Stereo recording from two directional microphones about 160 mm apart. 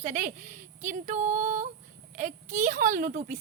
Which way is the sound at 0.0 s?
55° right (ahead or behind).